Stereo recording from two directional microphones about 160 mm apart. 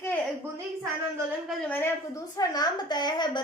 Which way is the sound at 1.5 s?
5° left (ahead or behind).